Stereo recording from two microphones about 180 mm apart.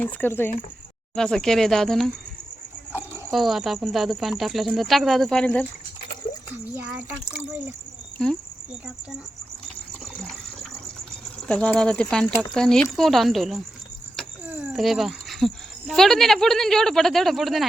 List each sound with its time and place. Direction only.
0.0 s speech: 10° left (ahead or behind)
3.3 s speech: centre (ahead or behind)
8.2 s speech: 5° left (ahead or behind)
11.4 s speech: 5° left (ahead or behind)